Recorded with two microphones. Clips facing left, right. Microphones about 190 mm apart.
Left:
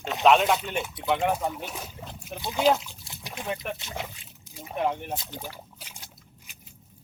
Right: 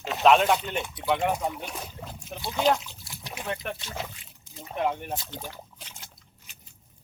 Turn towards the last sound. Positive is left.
turn(degrees=10)  # may be behind; listen again after turning